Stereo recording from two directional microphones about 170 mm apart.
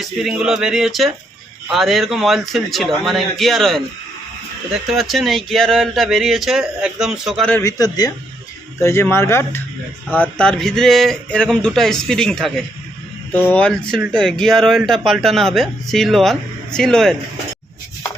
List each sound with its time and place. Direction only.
0.0 s speech: centre (ahead or behind)
4.9 s speech: centre (ahead or behind)
7.5 s speech: 20° left (ahead or behind); by 17.2 s 5° left (ahead or behind)